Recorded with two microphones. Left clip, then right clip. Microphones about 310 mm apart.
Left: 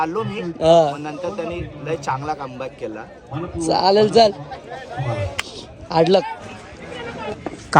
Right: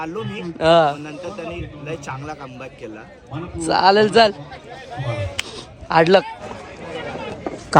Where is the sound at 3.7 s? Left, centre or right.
Right.